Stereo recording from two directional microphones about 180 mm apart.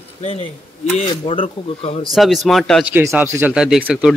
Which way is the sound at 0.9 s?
30° left (ahead or behind).